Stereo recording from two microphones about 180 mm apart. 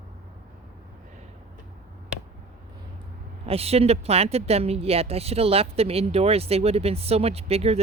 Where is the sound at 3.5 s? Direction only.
35° right (ahead or behind).